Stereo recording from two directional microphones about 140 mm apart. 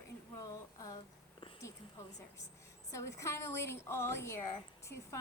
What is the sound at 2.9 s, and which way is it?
A woman's voice, 20° left (ahead or behind).